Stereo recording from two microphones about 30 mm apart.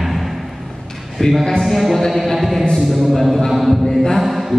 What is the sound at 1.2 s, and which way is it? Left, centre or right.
Speech, centre.